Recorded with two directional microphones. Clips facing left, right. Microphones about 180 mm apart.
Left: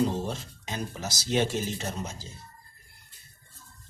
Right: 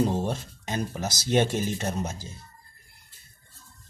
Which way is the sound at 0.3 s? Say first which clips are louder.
Right 4 dB; 55° right (ahead or behind).